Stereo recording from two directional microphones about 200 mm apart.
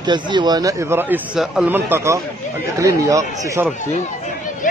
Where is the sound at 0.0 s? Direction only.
20° right (ahead or behind).